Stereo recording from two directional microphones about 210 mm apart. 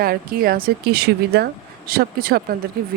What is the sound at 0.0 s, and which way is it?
Speech, 45° right (ahead or behind).